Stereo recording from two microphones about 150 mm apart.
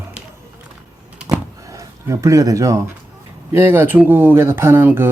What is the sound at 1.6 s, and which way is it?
Speech, 20° right (ahead or behind).